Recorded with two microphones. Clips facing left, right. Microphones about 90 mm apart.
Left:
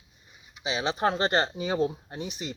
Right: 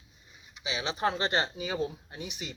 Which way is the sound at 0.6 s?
30° left (ahead or behind).